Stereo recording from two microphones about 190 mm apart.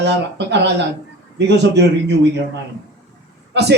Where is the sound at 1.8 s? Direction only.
65° right (ahead or behind).